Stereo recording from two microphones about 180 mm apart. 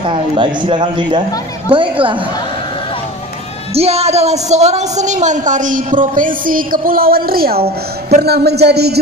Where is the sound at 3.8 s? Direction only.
35° right (ahead or behind); by 9.0 s 65° right (ahead or behind).